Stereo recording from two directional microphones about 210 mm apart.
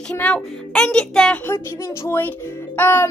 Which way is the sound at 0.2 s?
5° left (ahead or behind).